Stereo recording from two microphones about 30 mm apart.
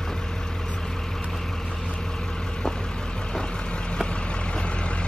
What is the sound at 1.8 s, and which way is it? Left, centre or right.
Vehicle, left.